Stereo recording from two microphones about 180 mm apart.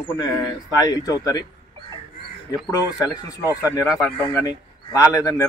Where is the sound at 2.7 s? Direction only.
20° left (ahead or behind).